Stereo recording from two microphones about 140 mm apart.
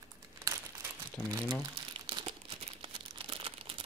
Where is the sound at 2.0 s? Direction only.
35° right (ahead or behind).